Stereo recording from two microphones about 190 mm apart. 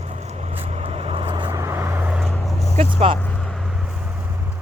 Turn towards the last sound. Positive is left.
turn(degrees=-5)  # may be behind; listen again after turning